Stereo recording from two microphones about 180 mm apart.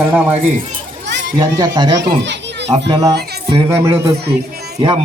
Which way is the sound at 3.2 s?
65° right (ahead or behind).